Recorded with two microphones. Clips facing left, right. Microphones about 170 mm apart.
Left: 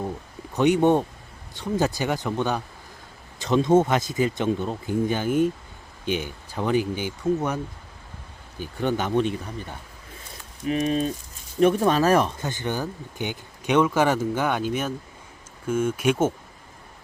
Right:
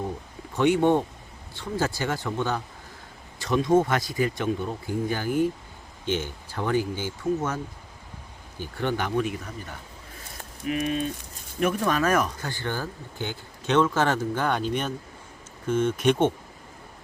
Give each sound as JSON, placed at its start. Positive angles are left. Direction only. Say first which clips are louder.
{"t": 0.5, "sound": "speech", "louder": "left 2 dB", "side_deg": 20}
{"t": 10.7, "sound": "speech", "louder": "left 3 dB", "side_deg": 35}